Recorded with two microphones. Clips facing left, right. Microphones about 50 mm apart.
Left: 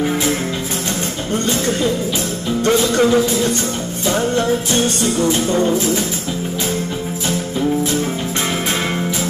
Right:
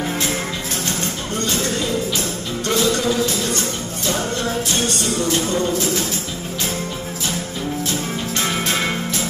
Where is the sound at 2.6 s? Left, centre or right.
Left.